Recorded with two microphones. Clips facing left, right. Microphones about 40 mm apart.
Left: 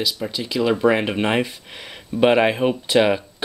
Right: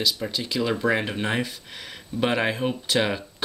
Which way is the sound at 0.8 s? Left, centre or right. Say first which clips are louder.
Left 6 dB; left.